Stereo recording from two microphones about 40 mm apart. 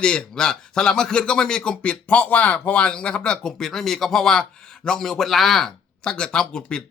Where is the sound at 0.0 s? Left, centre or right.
Left.